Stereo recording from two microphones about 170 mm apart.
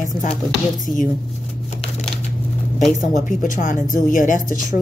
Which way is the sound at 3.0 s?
50° left (ahead or behind).